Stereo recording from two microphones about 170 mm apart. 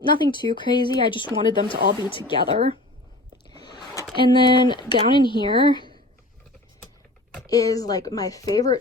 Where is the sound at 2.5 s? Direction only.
35° right (ahead or behind).